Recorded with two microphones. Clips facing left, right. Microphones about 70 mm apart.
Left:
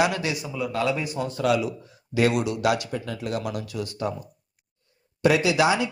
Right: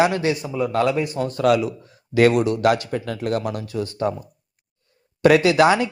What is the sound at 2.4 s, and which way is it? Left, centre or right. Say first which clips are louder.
A man's voice: right 5 dB; right.